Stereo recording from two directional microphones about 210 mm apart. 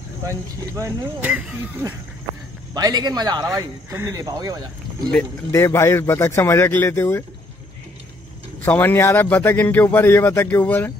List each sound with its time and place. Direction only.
0.3 s speech: 15° right (ahead or behind)
5.1 s a man's voice: 10° left (ahead or behind)
8.6 s a man's voice: 10° left (ahead or behind)